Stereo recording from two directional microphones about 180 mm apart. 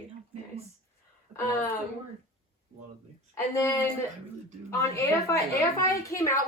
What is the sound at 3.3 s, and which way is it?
A woman's voice, 15° left (ahead or behind).